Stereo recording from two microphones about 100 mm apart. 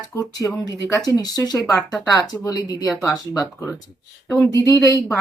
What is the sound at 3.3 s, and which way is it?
Speech, 30° left (ahead or behind).